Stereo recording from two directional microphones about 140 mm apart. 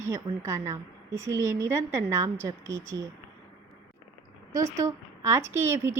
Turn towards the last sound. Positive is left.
turn(degrees=-20)  # may be behind; listen again after turning